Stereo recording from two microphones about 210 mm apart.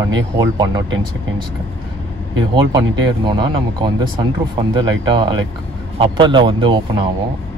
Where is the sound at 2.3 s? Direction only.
20° right (ahead or behind).